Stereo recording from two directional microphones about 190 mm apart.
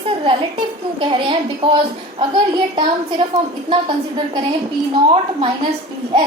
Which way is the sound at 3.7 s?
25° right (ahead or behind).